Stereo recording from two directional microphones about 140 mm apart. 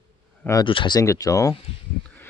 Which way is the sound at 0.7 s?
35° left (ahead or behind).